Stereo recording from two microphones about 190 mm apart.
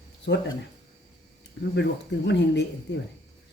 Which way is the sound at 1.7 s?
65° left (ahead or behind).